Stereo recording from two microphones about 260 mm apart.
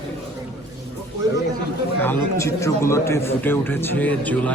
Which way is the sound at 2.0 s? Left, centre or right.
Centre.